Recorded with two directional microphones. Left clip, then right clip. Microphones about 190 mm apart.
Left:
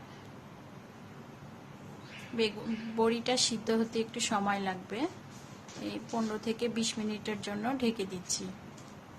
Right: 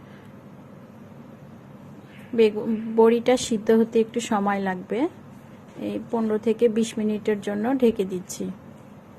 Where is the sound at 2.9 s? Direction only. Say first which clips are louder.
Right 11 dB; 25° right (ahead or behind).